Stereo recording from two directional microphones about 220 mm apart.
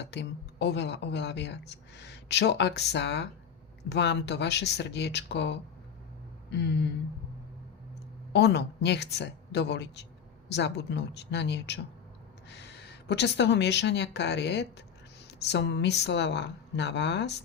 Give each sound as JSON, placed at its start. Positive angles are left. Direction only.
{"t": 0.0, "sound": "speech", "side_deg": 50}
{"t": 8.3, "sound": "speech", "side_deg": 50}